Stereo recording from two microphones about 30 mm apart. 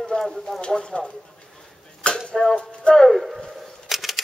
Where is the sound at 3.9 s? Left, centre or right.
Centre.